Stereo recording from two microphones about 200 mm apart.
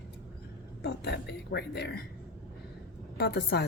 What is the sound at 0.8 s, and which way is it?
Speech, 55° left (ahead or behind).